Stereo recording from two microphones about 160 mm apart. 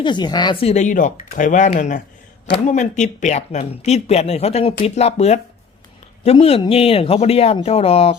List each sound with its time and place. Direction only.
0.0 s speech: 30° left (ahead or behind)